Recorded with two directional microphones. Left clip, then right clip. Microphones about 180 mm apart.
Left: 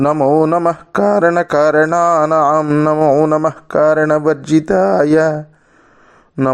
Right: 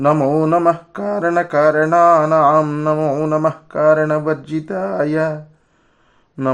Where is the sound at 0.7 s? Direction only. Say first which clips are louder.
Left 4 dB; 40° left (ahead or behind).